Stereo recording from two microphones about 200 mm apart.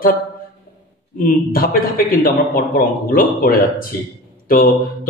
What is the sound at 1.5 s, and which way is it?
A man's voice, 45° left (ahead or behind).